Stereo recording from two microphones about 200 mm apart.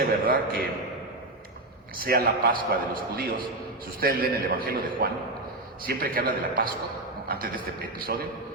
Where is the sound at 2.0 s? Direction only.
50° right (ahead or behind).